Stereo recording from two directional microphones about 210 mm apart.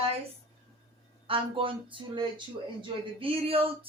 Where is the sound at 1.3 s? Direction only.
25° right (ahead or behind).